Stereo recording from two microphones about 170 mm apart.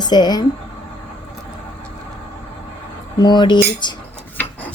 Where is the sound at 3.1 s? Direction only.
25° left (ahead or behind).